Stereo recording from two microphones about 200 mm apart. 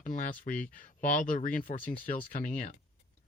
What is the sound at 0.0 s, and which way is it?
A man's voice, 40° left (ahead or behind).